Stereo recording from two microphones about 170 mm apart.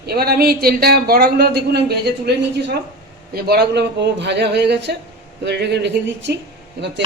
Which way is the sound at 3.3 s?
65° right (ahead or behind).